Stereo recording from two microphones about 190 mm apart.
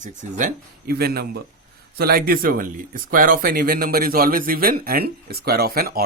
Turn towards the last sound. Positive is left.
turn(degrees=-50)  # may be behind; listen again after turning